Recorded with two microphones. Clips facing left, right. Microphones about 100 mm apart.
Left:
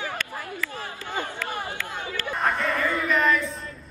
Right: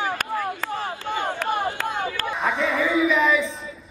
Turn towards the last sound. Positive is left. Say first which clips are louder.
# right 3 dB
turn(degrees=0)  # may be behind; listen again after turning